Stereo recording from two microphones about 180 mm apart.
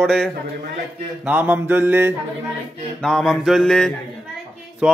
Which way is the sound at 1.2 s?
10° right (ahead or behind).